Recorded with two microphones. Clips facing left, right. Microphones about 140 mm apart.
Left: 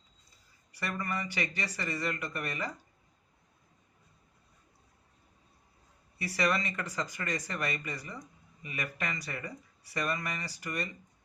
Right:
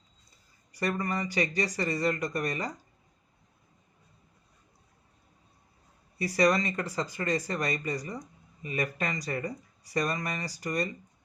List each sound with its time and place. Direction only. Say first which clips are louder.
0.7 s speech: right 5 dB; 40° right (ahead or behind)
6.1 s speech: right 6 dB; 35° right (ahead or behind)